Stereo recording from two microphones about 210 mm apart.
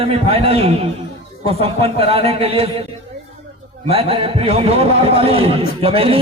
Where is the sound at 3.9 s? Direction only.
25° right (ahead or behind).